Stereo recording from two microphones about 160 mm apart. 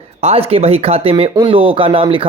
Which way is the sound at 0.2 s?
40° right (ahead or behind).